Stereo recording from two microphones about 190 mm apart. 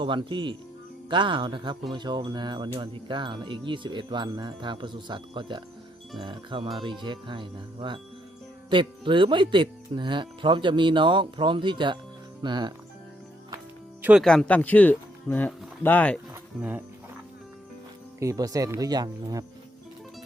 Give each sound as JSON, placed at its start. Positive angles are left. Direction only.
{"t": 0.0, "sound": "wind chime", "side_deg": -25}
{"t": 14.0, "sound": "speech", "side_deg": -5}
{"t": 16.3, "sound": "music", "side_deg": -10}
{"t": 18.2, "sound": "wind chime", "side_deg": -15}